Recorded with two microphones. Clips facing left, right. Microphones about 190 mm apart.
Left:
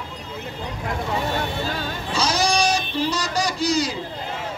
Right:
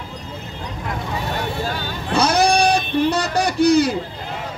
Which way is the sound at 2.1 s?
60° right (ahead or behind).